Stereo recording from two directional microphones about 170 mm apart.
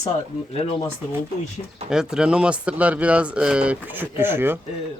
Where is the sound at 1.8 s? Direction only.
5° right (ahead or behind).